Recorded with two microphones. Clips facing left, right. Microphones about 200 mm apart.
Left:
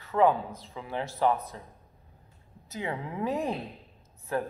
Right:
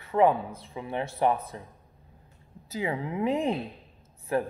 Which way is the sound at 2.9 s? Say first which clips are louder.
Right 3 dB; 25° right (ahead or behind).